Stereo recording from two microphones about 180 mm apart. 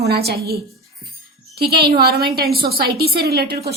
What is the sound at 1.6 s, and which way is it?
A woman's voice, 60° right (ahead or behind).